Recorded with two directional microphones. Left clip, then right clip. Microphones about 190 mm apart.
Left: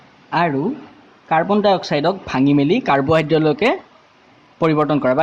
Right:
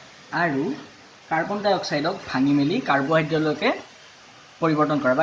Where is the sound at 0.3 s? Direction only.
50° left (ahead or behind).